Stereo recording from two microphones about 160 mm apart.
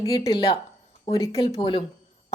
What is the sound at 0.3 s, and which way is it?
A woman's voice, 35° left (ahead or behind).